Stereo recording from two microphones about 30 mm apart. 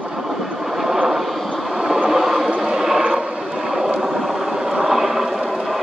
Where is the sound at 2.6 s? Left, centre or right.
Centre.